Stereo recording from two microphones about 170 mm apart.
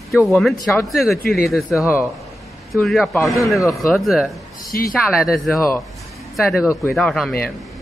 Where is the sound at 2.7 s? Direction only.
Centre (ahead or behind).